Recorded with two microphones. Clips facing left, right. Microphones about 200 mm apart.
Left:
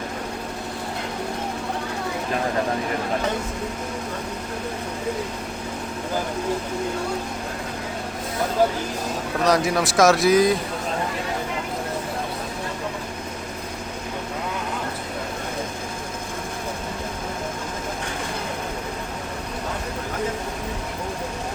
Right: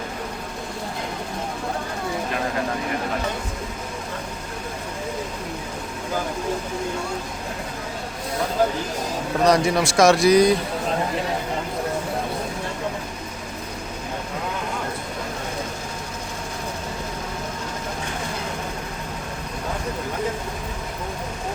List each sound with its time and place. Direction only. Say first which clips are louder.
9.4 s speech: right 2 dB; centre (ahead or behind)